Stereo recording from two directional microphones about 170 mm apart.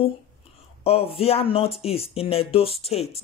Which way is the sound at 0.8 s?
35° left (ahead or behind).